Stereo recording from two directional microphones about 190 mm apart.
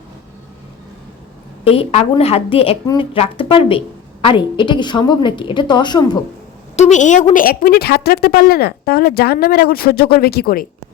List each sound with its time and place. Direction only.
1.6 s a woman's voice: 30° left (ahead or behind)
6.7 s a woman's voice: 40° left (ahead or behind)